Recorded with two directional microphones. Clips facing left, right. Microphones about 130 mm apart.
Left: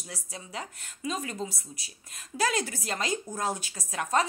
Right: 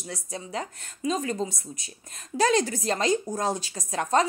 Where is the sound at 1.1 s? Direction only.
35° right (ahead or behind).